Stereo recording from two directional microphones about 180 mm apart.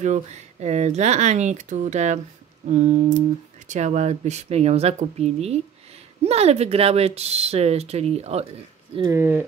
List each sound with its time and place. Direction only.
0.0 s speech: 40° right (ahead or behind)
9.0 s speech: 15° right (ahead or behind)